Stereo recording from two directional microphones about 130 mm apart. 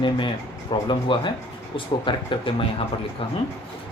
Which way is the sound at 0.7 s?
40° left (ahead or behind).